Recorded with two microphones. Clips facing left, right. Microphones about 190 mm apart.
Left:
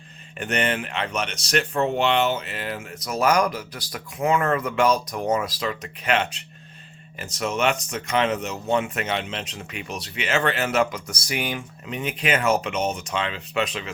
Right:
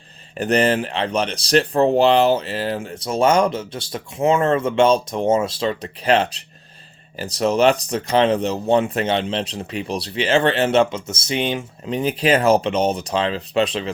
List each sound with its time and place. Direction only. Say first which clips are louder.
0.3 s speech: right 7 dB; 35° right (ahead or behind)